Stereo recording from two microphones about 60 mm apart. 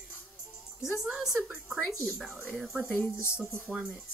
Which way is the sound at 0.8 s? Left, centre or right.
Centre.